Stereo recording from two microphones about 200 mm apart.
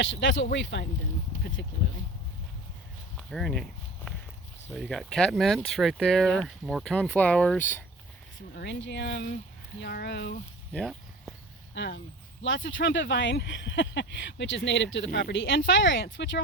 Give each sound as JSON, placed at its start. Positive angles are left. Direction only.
{"t": 0.0, "sound": "speech", "side_deg": 70}
{"t": 3.2, "sound": "speech", "side_deg": 5}
{"t": 8.5, "sound": "speech", "side_deg": 65}
{"t": 9.8, "sound": "speech", "side_deg": 55}
{"t": 10.7, "sound": "a sound", "side_deg": 0}
{"t": 11.7, "sound": "speech", "side_deg": 60}